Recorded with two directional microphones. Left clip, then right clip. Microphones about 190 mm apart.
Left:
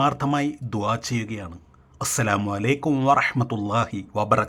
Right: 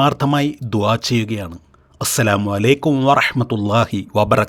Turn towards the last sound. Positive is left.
turn(degrees=-30)  # may be behind; listen again after turning